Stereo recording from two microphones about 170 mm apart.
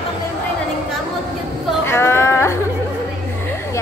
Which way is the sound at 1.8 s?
15° left (ahead or behind).